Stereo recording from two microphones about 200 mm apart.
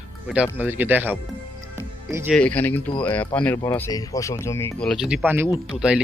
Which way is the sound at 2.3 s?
5° left (ahead or behind).